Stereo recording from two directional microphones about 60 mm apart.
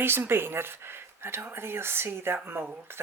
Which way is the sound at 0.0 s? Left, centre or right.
Right.